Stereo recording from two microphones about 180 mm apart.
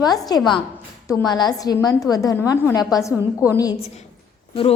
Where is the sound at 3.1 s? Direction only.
10° right (ahead or behind).